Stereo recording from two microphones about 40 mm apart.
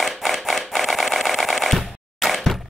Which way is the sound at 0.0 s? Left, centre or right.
Centre.